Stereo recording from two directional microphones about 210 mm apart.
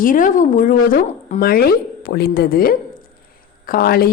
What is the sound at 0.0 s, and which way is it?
Speech, 40° left (ahead or behind).